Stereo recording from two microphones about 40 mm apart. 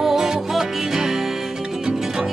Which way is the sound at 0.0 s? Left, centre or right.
Centre.